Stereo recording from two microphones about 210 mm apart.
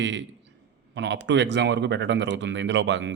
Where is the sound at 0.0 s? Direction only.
60° right (ahead or behind).